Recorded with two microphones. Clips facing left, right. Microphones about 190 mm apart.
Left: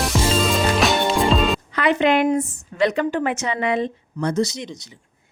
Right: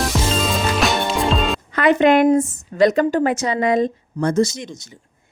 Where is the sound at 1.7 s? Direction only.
45° right (ahead or behind).